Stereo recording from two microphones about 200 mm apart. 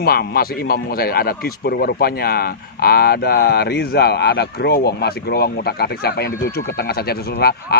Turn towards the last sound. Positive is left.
turn(degrees=50)  # may be behind; listen again after turning